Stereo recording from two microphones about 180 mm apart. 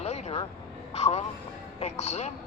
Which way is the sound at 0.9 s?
35° left (ahead or behind).